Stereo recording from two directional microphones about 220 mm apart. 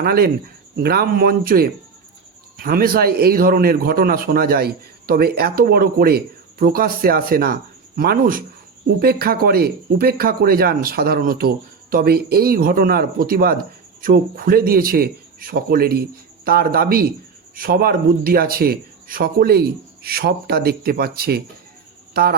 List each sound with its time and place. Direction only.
0.0 s a man's voice: 45° right (ahead or behind)